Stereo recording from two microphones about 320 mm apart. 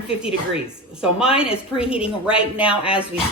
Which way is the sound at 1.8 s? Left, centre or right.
Centre.